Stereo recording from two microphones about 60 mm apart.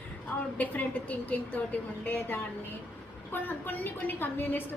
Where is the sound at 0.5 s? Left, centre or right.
Left.